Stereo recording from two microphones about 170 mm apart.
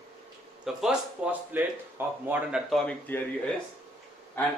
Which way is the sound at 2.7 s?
5° left (ahead or behind).